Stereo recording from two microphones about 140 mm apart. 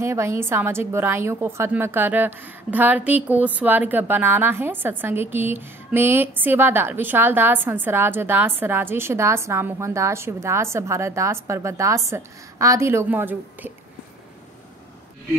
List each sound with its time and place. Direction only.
0.0 s a woman's voice: 20° right (ahead or behind)